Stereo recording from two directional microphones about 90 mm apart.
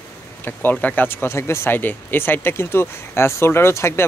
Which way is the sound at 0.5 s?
20° left (ahead or behind).